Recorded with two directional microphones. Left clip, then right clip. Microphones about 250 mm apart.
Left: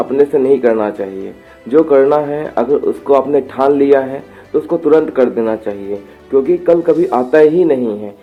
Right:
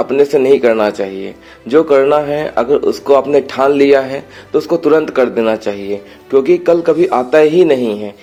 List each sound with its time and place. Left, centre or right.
0.0 s speech: right